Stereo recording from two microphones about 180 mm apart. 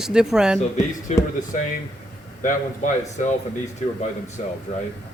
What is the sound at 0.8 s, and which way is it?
Speech, 45° left (ahead or behind).